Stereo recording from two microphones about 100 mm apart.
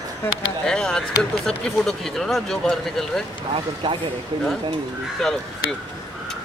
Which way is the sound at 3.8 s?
45° right (ahead or behind).